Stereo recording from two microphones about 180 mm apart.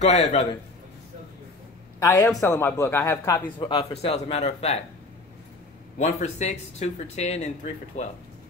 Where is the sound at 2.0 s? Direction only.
20° left (ahead or behind); by 4.8 s 35° left (ahead or behind).